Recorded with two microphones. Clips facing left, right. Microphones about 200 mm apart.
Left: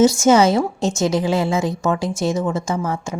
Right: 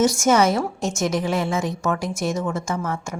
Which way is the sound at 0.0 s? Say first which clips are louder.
Left 4 dB; 25° left (ahead or behind).